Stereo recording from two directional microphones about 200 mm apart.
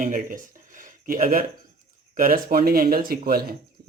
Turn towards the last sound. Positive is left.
turn(degrees=-50)  # may be behind; listen again after turning